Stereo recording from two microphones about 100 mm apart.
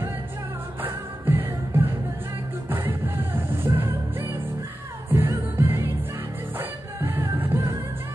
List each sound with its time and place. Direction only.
0.8 s music: 20° right (ahead or behind)
3.3 s music: 20° right (ahead or behind)